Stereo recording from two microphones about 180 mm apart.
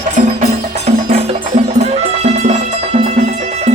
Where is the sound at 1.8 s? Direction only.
35° right (ahead or behind).